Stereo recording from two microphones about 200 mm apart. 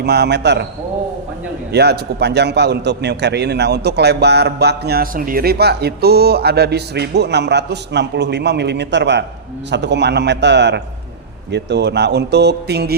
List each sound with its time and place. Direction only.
0.0 s a man's voice: 55° right (ahead or behind)
1.7 s a man's voice: 55° right (ahead or behind)